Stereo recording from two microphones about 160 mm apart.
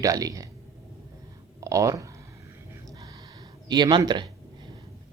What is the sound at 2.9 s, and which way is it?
Gasp, 20° right (ahead or behind).